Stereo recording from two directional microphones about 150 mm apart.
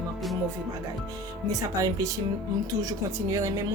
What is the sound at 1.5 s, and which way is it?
Speech, 20° right (ahead or behind).